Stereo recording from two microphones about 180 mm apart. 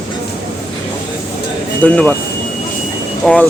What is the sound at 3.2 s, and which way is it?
Speech, 5° left (ahead or behind).